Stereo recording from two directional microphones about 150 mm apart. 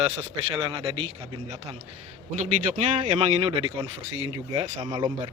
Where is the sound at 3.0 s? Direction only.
40° right (ahead or behind).